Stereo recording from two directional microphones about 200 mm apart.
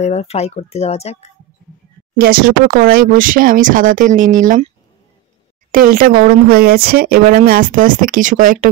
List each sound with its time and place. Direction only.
0.0 s speech: 30° left (ahead or behind)
2.1 s speech: 45° right (ahead or behind)
5.7 s speech: 45° right (ahead or behind)